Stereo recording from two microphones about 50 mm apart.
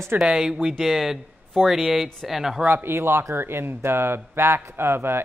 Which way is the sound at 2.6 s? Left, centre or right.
Right.